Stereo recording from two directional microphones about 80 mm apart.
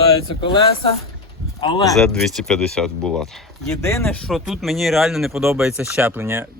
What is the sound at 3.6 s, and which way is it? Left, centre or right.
Speech, left.